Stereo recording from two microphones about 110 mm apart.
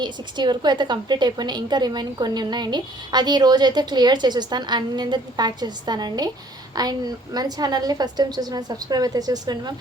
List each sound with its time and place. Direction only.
0.0 s a woman's voice: 45° right (ahead or behind)